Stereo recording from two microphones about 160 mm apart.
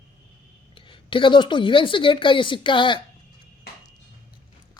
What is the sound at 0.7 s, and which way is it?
Speech, 30° left (ahead or behind).